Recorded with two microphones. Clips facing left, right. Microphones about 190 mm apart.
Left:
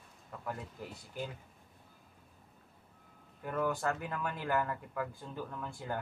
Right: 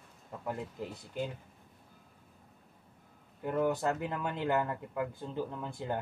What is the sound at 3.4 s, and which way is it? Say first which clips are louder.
Speech: right 4 dB; 20° right (ahead or behind).